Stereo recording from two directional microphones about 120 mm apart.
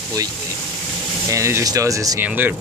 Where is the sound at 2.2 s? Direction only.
15° right (ahead or behind).